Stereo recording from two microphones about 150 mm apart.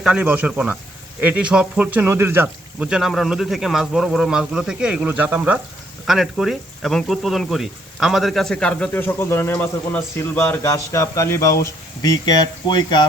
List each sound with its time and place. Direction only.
0.0 s speech: 5° right (ahead or behind); by 13.1 s 30° left (ahead or behind)